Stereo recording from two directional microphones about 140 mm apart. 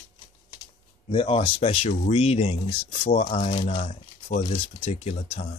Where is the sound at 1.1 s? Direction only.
45° left (ahead or behind).